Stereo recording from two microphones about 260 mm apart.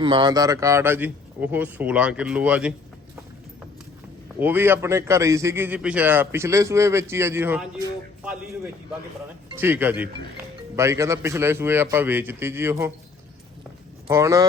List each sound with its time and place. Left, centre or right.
0.0 s a man's voice: centre
4.4 s a man's voice: centre
14.1 s a man's voice: centre